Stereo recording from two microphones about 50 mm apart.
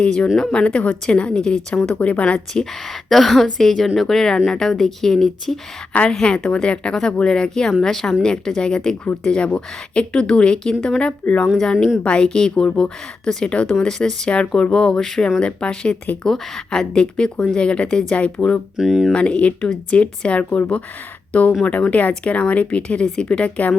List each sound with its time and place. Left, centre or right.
0.0 s a woman's voice: centre
2.0 s speech: left
2.5 s a woman's voice: centre
15.4 s a woman's voice: centre
18.8 s speech: centre
19.1 s a woman's voice: left